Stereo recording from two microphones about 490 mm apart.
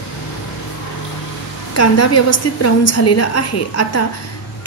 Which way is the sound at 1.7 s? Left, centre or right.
Left.